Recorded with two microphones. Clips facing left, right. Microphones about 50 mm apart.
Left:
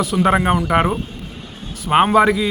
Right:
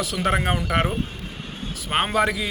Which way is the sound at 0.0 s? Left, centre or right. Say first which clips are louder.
Left 7 dB; centre.